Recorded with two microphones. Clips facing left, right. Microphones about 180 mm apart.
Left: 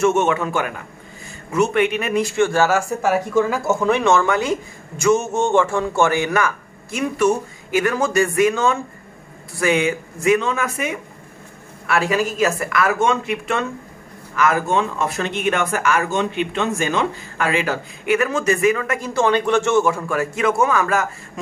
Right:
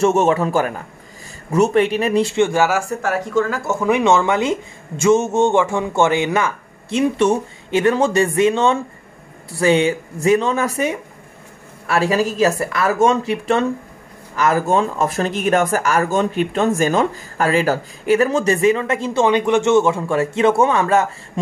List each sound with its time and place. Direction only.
0.0 s speech: 35° right (ahead or behind)
2.3 s speech: 15° right (ahead or behind)
3.0 s speech: 5° left (ahead or behind)
3.8 s speech: 15° right (ahead or behind)